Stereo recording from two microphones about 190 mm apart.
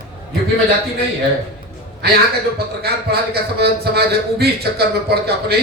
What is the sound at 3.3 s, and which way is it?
A man's voice, 55° right (ahead or behind).